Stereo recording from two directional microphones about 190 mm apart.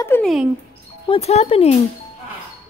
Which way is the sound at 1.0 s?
30° left (ahead or behind).